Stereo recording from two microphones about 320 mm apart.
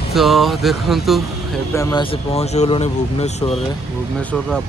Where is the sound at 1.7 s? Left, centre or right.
Centre.